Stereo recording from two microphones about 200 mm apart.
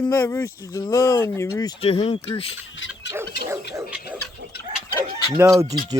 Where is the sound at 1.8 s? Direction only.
30° left (ahead or behind).